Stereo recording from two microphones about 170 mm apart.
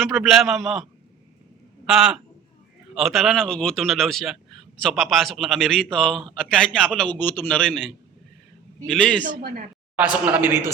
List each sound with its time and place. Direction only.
0.0 s a man's voice: centre (ahead or behind)
1.9 s a man's voice: 5° right (ahead or behind)
9.2 s speech: 55° right (ahead or behind)
9.9 s a man's voice: 10° right (ahead or behind)